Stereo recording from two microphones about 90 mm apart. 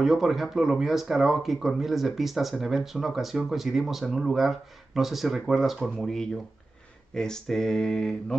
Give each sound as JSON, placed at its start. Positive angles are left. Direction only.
{"t": 0.0, "sound": "speech", "side_deg": 0}